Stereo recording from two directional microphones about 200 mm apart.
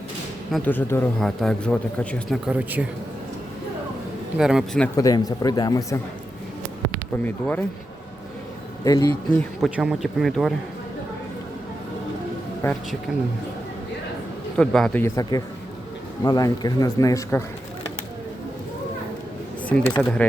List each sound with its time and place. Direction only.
0.5 s a man's voice: 10° left (ahead or behind)
2.5 s speech: 5° right (ahead or behind)
4.4 s a man's voice: 5° right (ahead or behind)
4.9 s speech: 20° left (ahead or behind)
7.3 s speech: 10° left (ahead or behind)
8.8 s speech: 20° left (ahead or behind)
9.6 s a man's voice: 5° right (ahead or behind)
12.6 s speech: 15° left (ahead or behind)
13.1 s a man's voice: 5° right (ahead or behind)
14.5 s a man's voice: 5° left (ahead or behind)
15.0 s speech: 15° left (ahead or behind)
20.0 s a man's voice: centre (ahead or behind)